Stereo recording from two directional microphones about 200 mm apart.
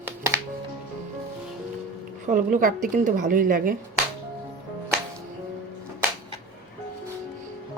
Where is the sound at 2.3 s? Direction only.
40° right (ahead or behind).